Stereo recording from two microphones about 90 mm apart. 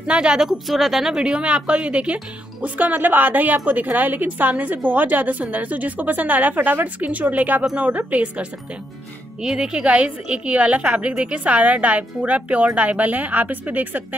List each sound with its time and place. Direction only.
0.0 s a woman's voice: 10° right (ahead or behind)